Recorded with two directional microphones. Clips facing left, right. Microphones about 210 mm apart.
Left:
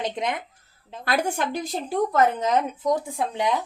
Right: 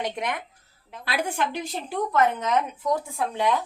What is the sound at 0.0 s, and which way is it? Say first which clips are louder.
Speech: left 2 dB; 20° left (ahead or behind).